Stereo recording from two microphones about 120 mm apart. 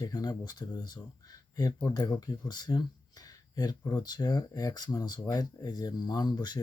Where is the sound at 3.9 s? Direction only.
35° left (ahead or behind).